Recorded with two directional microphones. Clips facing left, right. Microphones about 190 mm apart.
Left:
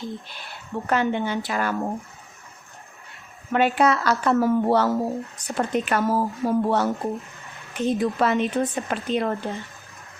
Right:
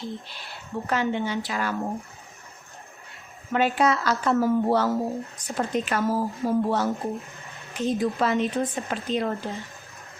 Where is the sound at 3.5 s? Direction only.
65° left (ahead or behind).